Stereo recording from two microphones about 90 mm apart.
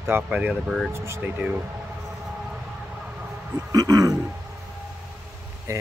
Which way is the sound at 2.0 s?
Centre (ahead or behind).